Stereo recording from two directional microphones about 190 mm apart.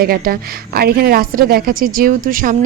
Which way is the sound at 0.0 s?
50° right (ahead or behind).